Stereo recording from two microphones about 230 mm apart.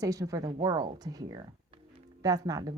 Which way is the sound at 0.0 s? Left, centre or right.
Centre.